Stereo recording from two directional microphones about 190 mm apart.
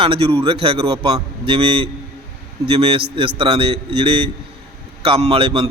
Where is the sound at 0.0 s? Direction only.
30° right (ahead or behind).